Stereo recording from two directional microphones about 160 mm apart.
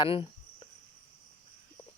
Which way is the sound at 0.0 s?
35° left (ahead or behind).